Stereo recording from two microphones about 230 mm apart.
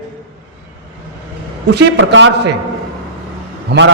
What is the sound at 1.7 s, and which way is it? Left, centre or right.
Speech, right.